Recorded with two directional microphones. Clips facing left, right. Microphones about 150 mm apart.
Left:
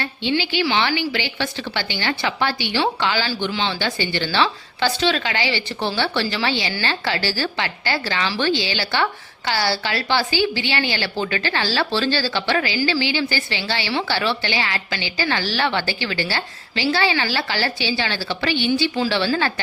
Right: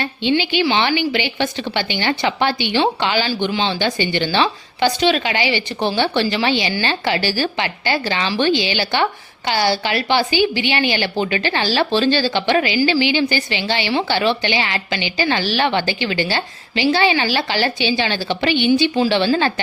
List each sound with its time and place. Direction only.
0.0 s a woman's voice: 20° right (ahead or behind)